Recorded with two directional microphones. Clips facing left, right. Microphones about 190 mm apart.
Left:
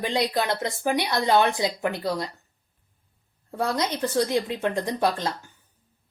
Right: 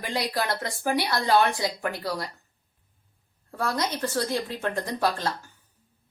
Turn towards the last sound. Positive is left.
turn(degrees=20)  # may be behind; listen again after turning